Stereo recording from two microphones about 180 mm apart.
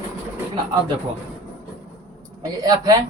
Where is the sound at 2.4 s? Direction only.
20° right (ahead or behind).